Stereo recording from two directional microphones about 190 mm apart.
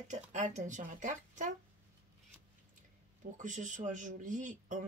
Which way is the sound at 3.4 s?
40° right (ahead or behind).